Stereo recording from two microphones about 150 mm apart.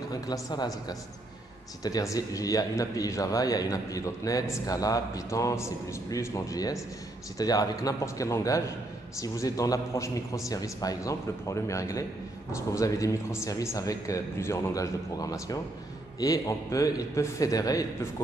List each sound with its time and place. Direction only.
0.1 s a man's voice: 25° left (ahead or behind)